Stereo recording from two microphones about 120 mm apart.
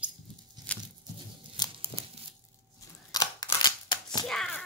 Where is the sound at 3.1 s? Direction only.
35° left (ahead or behind).